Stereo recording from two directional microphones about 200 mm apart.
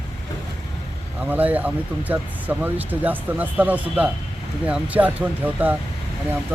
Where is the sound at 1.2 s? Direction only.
10° right (ahead or behind).